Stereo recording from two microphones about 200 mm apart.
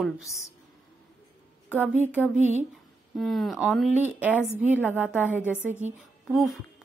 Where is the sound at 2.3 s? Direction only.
35° right (ahead or behind).